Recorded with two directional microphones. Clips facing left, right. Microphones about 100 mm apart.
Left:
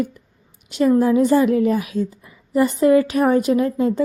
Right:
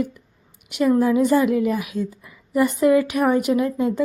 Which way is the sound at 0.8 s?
25° left (ahead or behind).